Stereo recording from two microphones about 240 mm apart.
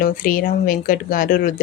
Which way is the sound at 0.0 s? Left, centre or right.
Left.